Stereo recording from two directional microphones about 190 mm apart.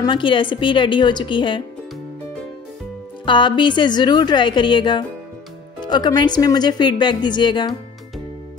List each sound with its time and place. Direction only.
0.0 s speech: 25° left (ahead or behind)
3.3 s speech: 25° left (ahead or behind)